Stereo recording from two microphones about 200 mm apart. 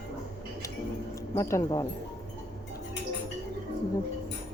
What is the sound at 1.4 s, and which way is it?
Speech, 15° left (ahead or behind).